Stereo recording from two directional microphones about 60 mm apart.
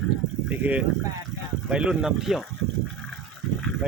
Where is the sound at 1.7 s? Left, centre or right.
Centre.